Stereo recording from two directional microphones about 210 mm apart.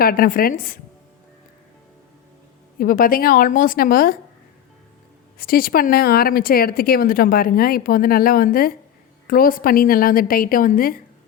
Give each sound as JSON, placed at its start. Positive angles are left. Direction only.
{"t": 0.0, "sound": "speech", "side_deg": 45}
{"t": 2.7, "sound": "a woman's voice", "side_deg": 40}
{"t": 5.4, "sound": "speech", "side_deg": 45}